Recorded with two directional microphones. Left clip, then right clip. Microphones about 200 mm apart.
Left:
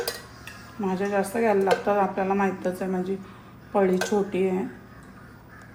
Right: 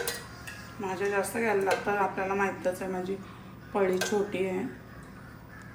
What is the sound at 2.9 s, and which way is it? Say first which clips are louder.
A woman's voice: left 4 dB; centre (ahead or behind).